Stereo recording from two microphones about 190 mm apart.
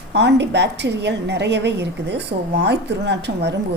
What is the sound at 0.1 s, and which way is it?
A woman's voice, 65° right (ahead or behind).